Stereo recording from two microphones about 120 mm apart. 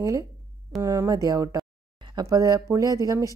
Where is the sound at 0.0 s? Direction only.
25° right (ahead or behind).